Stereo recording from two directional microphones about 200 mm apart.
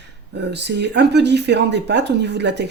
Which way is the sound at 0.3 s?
55° right (ahead or behind).